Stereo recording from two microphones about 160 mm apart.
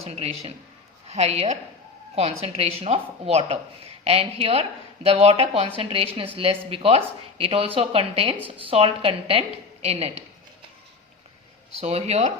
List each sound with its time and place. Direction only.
0.0 s a woman's voice: 40° right (ahead or behind)
11.8 s a woman's voice: 40° right (ahead or behind)